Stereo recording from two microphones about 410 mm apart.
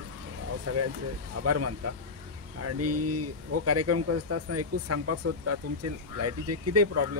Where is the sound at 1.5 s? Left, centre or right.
Right.